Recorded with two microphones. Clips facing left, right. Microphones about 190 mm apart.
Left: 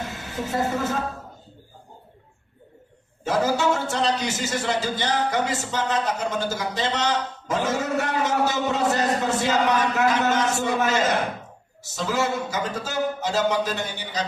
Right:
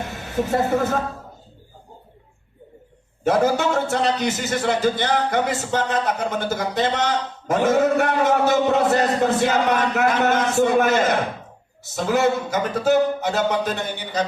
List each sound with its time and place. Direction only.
0.1 s a woman's voice: 55° right (ahead or behind)
3.2 s a man's voice: 55° right (ahead or behind)